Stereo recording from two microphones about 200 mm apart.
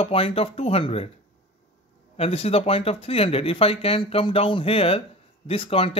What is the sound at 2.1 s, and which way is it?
Speech, 30° left (ahead or behind).